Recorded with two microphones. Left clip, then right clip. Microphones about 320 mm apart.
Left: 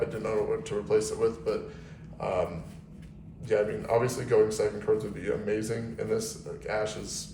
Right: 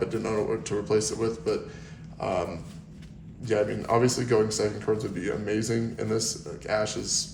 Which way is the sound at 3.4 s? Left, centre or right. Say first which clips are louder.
Right 1 dB; right.